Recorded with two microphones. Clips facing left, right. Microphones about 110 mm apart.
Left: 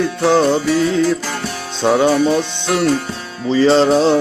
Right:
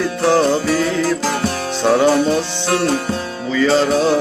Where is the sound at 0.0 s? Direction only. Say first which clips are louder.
Left 1 dB; 20° left (ahead or behind).